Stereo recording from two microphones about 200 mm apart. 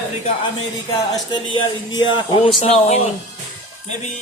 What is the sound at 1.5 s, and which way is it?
Speech, 20° left (ahead or behind).